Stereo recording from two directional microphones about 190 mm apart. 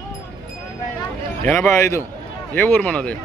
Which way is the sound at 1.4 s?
10° left (ahead or behind).